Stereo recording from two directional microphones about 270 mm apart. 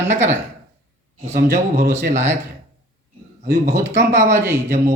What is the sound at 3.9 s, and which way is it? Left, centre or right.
Speech, right.